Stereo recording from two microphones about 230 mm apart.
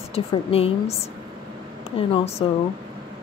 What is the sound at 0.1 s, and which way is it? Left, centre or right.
Speech, left.